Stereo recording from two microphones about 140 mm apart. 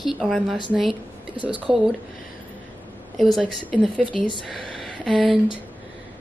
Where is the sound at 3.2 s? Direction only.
Centre (ahead or behind).